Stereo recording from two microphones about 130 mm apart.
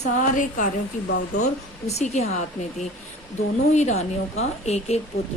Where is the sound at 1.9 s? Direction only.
60° left (ahead or behind).